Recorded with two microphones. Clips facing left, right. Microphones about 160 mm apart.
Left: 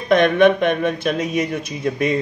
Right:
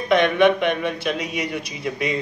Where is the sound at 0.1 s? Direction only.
45° left (ahead or behind).